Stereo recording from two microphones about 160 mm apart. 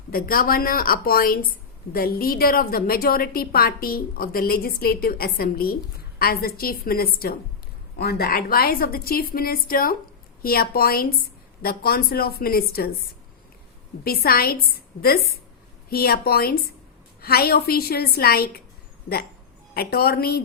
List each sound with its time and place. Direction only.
0.1 s a woman's voice: 65° left (ahead or behind)
14.0 s a woman's voice: 70° left (ahead or behind)
15.9 s a woman's voice: 70° left (ahead or behind)
19.7 s a woman's voice: 75° left (ahead or behind)